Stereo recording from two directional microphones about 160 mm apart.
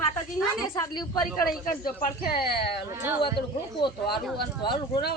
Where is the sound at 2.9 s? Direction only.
15° right (ahead or behind).